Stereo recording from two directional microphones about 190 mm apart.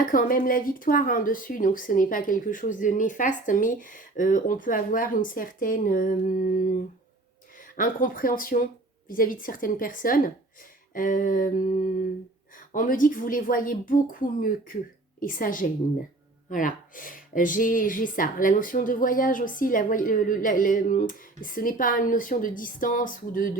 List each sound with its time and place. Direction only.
0.0 s speech: 45° left (ahead or behind)
7.8 s speech: 45° left (ahead or behind)